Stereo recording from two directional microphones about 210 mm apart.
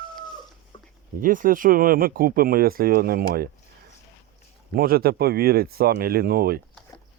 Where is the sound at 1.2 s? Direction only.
40° right (ahead or behind).